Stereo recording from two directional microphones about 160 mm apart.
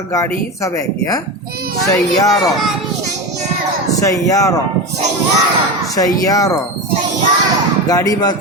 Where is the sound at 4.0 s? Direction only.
20° left (ahead or behind).